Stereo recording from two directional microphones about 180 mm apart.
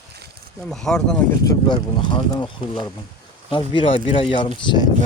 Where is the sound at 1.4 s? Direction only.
20° left (ahead or behind).